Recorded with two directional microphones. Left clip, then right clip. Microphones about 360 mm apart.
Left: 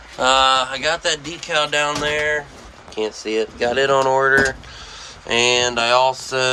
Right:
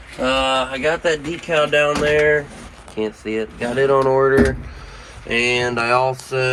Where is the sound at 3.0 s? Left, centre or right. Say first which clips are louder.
Left 2 dB; centre.